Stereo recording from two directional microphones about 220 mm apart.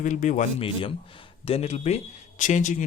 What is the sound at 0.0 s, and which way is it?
Speech, 35° left (ahead or behind).